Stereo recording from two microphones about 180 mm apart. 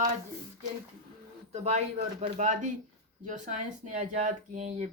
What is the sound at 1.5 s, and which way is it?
Speech, 40° right (ahead or behind).